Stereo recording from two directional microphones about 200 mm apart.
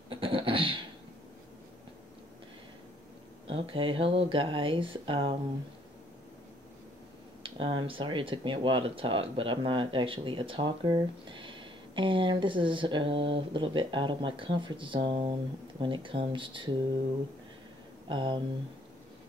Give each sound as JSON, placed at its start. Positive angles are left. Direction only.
{"t": 0.1, "sound": "a sound", "side_deg": -25}
{"t": 3.4, "sound": "speech", "side_deg": -25}
{"t": 7.4, "sound": "speech", "side_deg": -25}
{"t": 18.0, "sound": "speech", "side_deg": -25}